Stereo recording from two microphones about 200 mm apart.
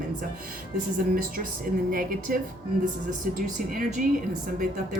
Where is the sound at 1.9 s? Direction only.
45° right (ahead or behind).